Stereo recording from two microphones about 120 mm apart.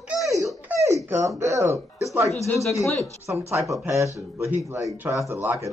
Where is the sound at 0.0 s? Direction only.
5° right (ahead or behind).